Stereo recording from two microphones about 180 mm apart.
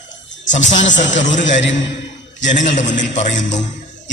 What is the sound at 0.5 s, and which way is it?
Speech, 40° left (ahead or behind).